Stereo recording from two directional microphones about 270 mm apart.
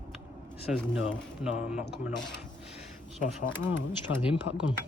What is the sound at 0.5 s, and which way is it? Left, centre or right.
Speech, centre.